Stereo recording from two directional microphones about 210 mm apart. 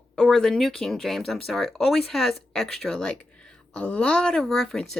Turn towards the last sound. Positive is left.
turn(degrees=0)  # may be behind; listen again after turning